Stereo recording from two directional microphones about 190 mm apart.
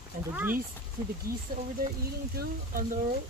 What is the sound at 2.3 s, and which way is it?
Speech, 45° right (ahead or behind).